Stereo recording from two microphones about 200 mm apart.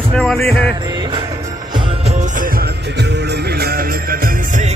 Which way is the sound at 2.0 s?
40° right (ahead or behind).